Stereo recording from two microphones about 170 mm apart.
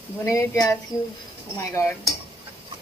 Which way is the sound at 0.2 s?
15° left (ahead or behind).